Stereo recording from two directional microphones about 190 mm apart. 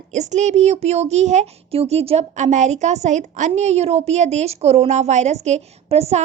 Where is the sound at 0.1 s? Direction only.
40° right (ahead or behind).